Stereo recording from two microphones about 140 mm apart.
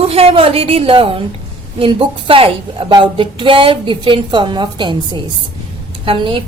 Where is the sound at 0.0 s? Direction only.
45° right (ahead or behind).